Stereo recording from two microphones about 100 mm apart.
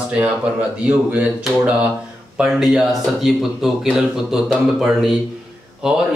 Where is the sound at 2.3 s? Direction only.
5° right (ahead or behind).